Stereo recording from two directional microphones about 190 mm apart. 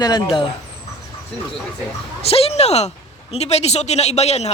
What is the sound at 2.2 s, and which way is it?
A man's voice, 30° left (ahead or behind).